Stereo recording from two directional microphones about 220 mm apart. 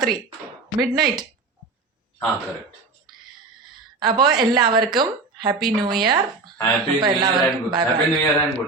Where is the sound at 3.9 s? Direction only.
20° right (ahead or behind).